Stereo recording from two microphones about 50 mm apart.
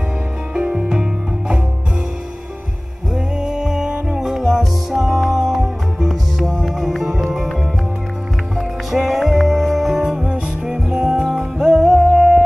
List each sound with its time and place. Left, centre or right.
0.6 s music: right
3.3 s music: centre
8.5 s music: centre